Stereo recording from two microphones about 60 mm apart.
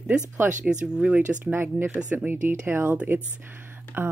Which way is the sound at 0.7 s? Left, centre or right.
Centre.